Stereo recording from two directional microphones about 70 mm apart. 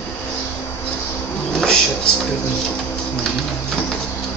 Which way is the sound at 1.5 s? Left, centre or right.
Centre.